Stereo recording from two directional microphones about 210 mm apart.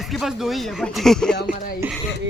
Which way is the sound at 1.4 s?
45° left (ahead or behind).